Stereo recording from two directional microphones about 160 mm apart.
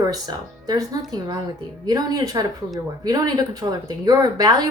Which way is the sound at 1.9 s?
25° right (ahead or behind).